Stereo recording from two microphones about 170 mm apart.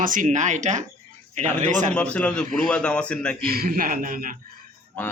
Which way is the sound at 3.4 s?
60° right (ahead or behind).